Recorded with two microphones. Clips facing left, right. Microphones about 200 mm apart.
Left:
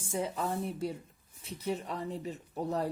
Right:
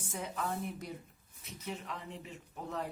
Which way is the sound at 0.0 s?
30° left (ahead or behind).